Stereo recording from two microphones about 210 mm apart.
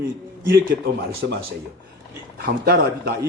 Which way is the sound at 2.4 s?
45° right (ahead or behind).